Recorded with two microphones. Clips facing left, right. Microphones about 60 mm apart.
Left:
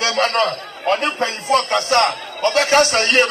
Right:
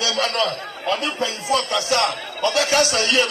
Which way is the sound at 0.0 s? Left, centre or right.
Left.